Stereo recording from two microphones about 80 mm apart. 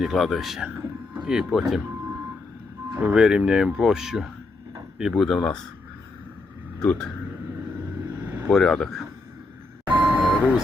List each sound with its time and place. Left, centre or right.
0.0 s speech: centre
3.0 s speech: centre
6.7 s speech: centre
8.4 s speech: centre
9.8 s beep: right
10.2 s vehicle: centre